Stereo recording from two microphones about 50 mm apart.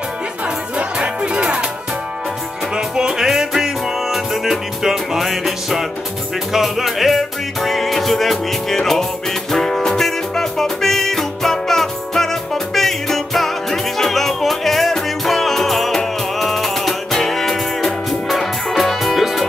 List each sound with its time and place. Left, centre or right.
0.7 s music: right
2.7 s music: centre